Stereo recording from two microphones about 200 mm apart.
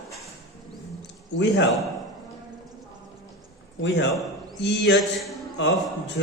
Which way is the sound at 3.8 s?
65° left (ahead or behind).